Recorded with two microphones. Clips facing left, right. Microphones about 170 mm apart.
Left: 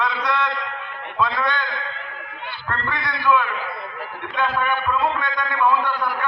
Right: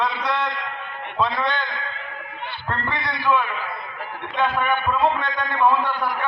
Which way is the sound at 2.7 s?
25° right (ahead or behind).